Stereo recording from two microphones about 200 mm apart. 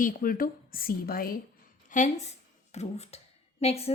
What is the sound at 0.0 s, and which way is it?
A woman's voice, 45° left (ahead or behind).